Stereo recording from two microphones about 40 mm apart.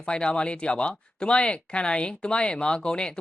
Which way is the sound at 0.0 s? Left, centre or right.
Left.